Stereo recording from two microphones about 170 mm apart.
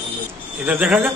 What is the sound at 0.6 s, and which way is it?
Speech, 10° right (ahead or behind).